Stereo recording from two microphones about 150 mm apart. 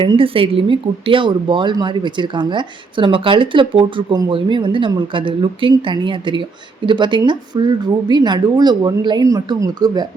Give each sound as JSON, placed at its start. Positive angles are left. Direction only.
{"t": 0.0, "sound": "a woman's voice", "side_deg": -35}